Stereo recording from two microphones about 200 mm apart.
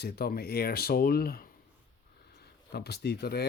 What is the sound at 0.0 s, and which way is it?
Speech, 50° left (ahead or behind).